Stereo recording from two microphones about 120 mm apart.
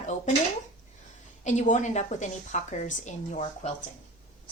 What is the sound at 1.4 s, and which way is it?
Speech, 85° left.